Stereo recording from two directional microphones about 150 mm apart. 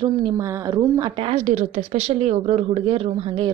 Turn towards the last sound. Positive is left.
turn(degrees=-35)  # may be behind; listen again after turning